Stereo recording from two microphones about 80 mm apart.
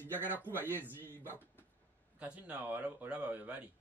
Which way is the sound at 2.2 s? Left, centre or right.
Centre.